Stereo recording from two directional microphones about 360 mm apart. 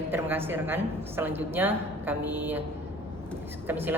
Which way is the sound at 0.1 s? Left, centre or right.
Centre.